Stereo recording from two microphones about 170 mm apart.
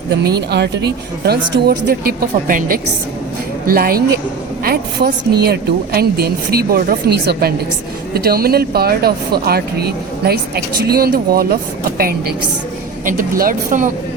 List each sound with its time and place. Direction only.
0.3 s speech: 75° right (ahead or behind)
1.6 s speech: 60° right (ahead or behind)